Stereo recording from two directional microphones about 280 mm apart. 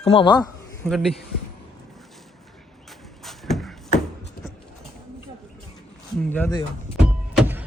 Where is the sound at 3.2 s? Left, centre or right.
Centre.